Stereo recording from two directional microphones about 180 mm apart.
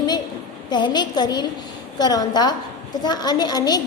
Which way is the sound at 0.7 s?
25° left (ahead or behind).